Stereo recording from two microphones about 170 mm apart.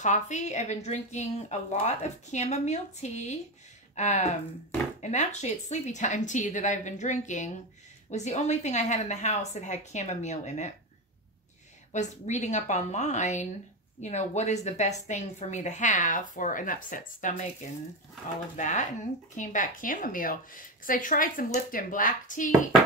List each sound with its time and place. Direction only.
0.0 s a woman's voice: 45° left (ahead or behind)
11.9 s a woman's voice: 45° left (ahead or behind)
18.6 s a woman's voice: 45° left (ahead or behind)